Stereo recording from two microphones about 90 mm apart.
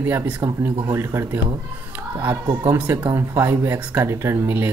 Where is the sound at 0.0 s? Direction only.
25° right (ahead or behind).